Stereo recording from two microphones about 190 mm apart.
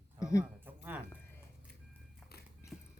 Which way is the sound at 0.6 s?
10° right (ahead or behind).